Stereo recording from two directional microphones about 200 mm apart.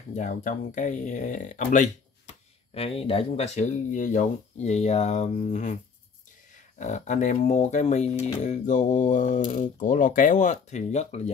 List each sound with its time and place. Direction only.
0.1 s speech: 40° left (ahead or behind)
6.8 s speech: 35° left (ahead or behind)